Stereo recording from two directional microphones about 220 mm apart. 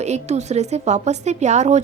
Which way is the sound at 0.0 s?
30° right (ahead or behind).